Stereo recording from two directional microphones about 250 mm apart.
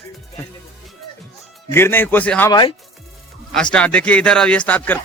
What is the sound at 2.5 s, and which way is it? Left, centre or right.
Speech, centre.